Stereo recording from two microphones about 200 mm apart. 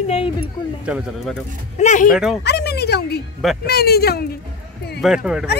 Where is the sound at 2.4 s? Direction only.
55° left (ahead or behind).